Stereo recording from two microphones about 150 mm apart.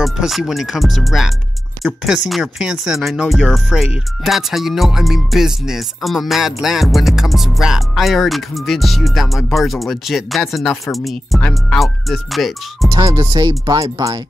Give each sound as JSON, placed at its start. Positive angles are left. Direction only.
{"t": 0.0, "sound": "speech", "side_deg": 0}
{"t": 12.9, "sound": "speech", "side_deg": -25}